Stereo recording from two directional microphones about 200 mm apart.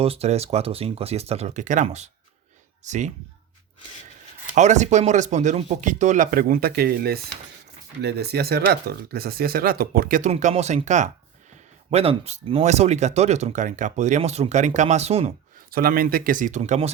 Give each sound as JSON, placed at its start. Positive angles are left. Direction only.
{"t": 0.0, "sound": "speech", "side_deg": -30}
{"t": 4.5, "sound": "speech", "side_deg": -35}
{"t": 15.7, "sound": "speech", "side_deg": -50}